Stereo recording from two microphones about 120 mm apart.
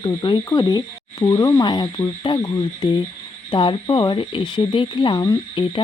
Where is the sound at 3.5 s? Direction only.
45° left (ahead or behind).